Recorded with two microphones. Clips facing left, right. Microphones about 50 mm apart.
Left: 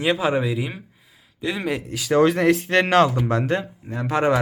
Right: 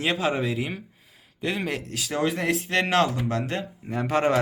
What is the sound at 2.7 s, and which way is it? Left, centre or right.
Speech, left.